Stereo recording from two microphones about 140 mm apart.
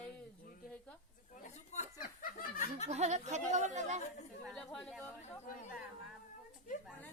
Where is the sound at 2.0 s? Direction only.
90° left.